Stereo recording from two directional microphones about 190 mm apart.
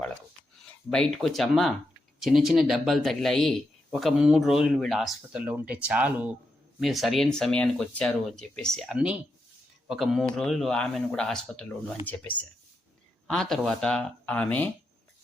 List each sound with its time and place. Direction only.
0.9 s speech: 5° left (ahead or behind)